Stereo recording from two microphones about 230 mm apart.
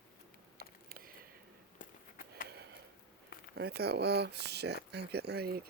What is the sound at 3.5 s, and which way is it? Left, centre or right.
Speech, right.